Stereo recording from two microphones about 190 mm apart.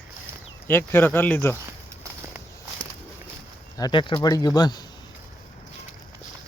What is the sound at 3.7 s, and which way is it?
Speech, 25° left (ahead or behind).